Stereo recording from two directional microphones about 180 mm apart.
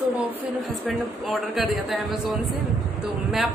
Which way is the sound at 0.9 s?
Centre (ahead or behind).